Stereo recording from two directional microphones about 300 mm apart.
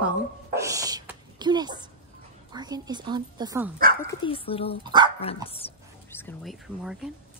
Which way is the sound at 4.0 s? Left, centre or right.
Centre.